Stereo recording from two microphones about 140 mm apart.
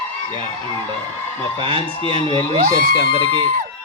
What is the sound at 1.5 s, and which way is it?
Speech, 40° right (ahead or behind).